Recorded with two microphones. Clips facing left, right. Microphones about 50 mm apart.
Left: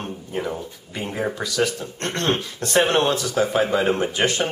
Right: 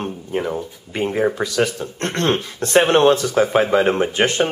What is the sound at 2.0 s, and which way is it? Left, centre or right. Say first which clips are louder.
Speech: right 3 dB; right.